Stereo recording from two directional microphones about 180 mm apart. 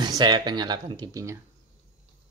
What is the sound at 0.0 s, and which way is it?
A man's voice, 25° right (ahead or behind).